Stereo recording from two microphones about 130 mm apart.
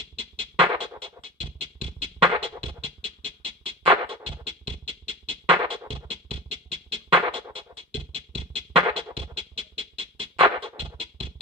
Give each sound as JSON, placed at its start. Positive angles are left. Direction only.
{"t": 0.4, "sound": "music", "side_deg": -40}